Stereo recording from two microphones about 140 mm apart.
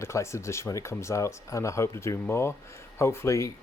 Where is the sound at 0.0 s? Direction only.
20° left (ahead or behind).